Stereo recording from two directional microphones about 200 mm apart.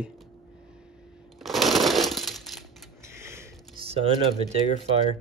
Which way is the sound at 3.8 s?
30° right (ahead or behind).